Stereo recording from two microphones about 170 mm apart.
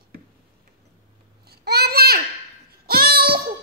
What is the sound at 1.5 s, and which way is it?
Babbling, 70° right (ahead or behind).